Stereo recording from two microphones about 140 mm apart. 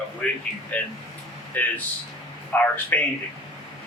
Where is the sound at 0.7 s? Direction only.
10° left (ahead or behind).